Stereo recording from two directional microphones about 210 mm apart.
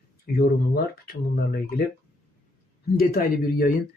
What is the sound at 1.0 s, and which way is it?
Speech, 45° left (ahead or behind).